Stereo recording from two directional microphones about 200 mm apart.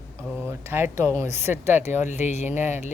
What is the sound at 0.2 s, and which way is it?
Speech, 15° right (ahead or behind).